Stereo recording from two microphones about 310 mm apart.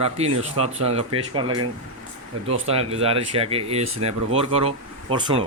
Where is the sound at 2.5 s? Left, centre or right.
Centre.